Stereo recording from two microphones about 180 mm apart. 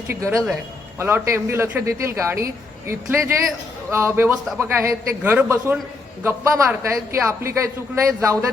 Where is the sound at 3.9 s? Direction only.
15° right (ahead or behind).